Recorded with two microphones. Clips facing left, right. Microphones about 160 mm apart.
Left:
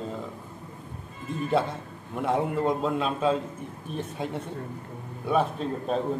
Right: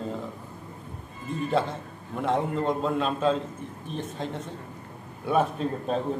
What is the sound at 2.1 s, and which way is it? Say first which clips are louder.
A man's voice: even; 5° left (ahead or behind).